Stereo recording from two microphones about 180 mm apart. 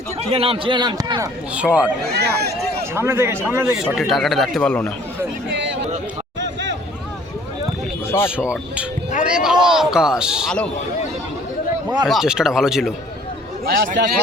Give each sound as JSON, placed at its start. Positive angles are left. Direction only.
{"t": 0.2, "sound": "a man's voice", "side_deg": -30}
{"t": 1.5, "sound": "a man's voice", "side_deg": -5}
{"t": 2.0, "sound": "speech", "side_deg": -65}
{"t": 2.9, "sound": "a man's voice", "side_deg": -15}
{"t": 3.8, "sound": "a man's voice", "side_deg": 0}
{"t": 8.4, "sound": "a man's voice", "side_deg": -5}
{"t": 12.0, "sound": "a man's voice", "side_deg": 0}
{"t": 13.7, "sound": "a man's voice", "side_deg": -75}